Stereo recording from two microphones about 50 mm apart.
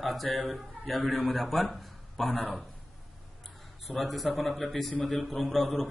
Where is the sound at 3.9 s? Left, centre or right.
Centre.